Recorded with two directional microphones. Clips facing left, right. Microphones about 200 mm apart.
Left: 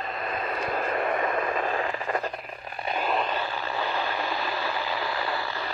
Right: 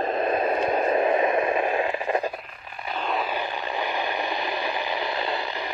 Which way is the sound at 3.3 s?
15° right (ahead or behind).